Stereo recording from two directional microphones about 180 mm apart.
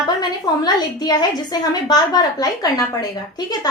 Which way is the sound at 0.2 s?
25° left (ahead or behind).